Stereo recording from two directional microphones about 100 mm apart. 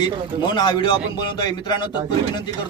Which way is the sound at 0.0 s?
50° left (ahead or behind).